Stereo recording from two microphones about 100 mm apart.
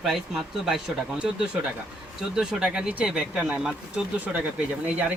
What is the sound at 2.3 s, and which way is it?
Speech, 10° right (ahead or behind).